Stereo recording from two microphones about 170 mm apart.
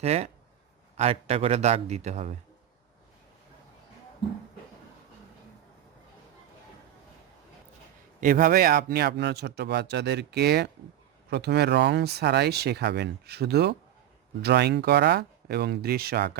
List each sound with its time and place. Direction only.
0.0 s a man's voice: 35° right (ahead or behind)
8.2 s speech: 55° right (ahead or behind)